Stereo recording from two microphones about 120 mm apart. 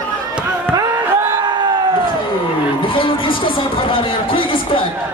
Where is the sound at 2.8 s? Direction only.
45° left (ahead or behind).